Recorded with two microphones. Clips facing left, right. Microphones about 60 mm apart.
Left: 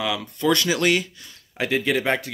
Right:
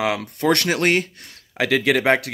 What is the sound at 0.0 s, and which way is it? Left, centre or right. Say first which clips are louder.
Speech: right 2 dB; right.